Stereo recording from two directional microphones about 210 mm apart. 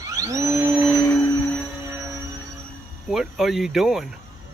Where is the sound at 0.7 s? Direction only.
5° left (ahead or behind).